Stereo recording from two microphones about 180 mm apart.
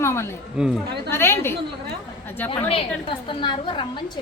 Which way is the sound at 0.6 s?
5° right (ahead or behind).